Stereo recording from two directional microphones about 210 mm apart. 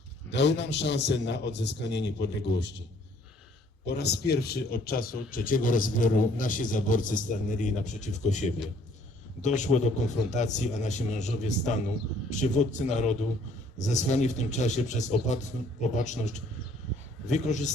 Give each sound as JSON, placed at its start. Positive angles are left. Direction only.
{"t": 0.3, "sound": "a man's voice", "side_deg": 55}
{"t": 3.8, "sound": "speech", "side_deg": 50}